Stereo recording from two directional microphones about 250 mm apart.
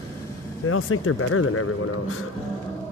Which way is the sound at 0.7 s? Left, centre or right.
Left.